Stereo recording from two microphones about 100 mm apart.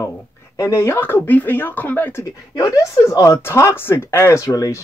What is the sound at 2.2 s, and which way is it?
Speech, 30° left (ahead or behind).